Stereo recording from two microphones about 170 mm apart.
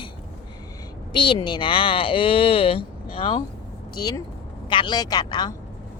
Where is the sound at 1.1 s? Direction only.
30° left (ahead or behind).